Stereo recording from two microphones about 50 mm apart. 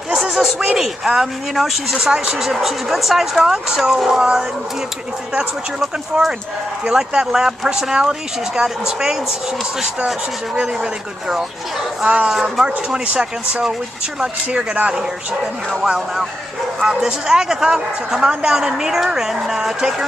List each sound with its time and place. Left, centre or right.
0.1 s a sound: centre
0.7 s speech: centre
5.8 s speech: centre
10.5 s speech: centre
12.0 s speech: right
12.3 s speech: centre
12.9 s speech: right
15.7 s speech: centre